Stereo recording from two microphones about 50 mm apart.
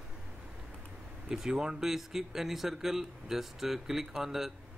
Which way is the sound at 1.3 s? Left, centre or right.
Centre.